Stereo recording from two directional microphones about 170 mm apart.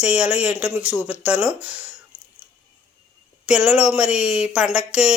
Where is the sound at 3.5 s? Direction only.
5° right (ahead or behind).